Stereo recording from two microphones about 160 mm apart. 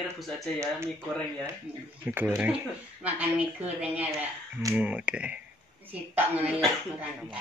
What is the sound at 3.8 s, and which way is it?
Speech, 10° right (ahead or behind).